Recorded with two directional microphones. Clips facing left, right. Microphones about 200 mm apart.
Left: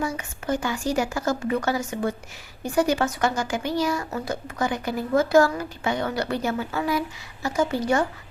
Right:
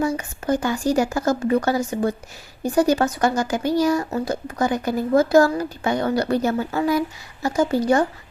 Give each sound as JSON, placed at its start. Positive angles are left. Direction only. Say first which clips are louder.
{"t": 0.0, "sound": "speech", "louder": "right 5 dB", "side_deg": -40}